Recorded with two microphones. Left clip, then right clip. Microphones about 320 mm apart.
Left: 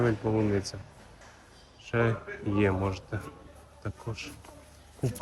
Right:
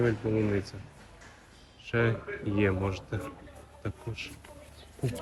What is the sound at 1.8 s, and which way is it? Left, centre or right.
Speech, centre.